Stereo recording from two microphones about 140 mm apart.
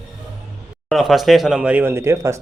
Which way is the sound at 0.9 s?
Centre (ahead or behind).